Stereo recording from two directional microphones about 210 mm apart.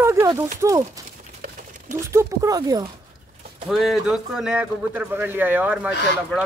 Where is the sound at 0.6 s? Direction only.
15° right (ahead or behind).